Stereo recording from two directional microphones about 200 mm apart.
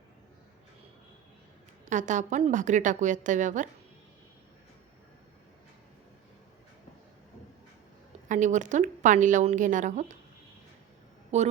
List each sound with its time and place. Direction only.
1.9 s a woman's voice: 40° right (ahead or behind)
8.3 s a woman's voice: 40° right (ahead or behind)
11.3 s a woman's voice: 35° right (ahead or behind)